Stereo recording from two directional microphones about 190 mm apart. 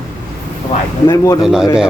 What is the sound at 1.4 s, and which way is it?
Speech, centre (ahead or behind).